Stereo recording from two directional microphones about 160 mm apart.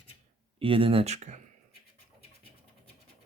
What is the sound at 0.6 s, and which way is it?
Speech, 35° right (ahead or behind).